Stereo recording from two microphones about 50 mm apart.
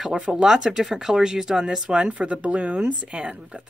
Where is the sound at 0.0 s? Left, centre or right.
Centre.